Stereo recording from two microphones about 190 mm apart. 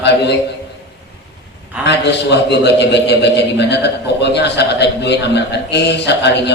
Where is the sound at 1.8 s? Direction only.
65° left (ahead or behind).